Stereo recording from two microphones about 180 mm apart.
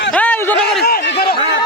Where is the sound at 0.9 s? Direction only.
65° left (ahead or behind).